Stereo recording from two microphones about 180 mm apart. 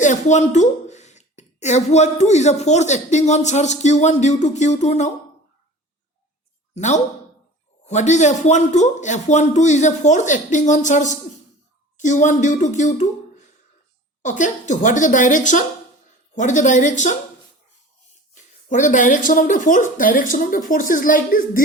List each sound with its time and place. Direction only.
0.0 s a woman's voice: 40° left (ahead or behind)
6.7 s a woman's voice: 40° left (ahead or behind)
14.2 s speech: 45° left (ahead or behind)
18.7 s speech: 45° left (ahead or behind)